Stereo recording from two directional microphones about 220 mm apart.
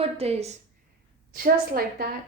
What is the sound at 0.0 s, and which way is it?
Speech, 25° right (ahead or behind).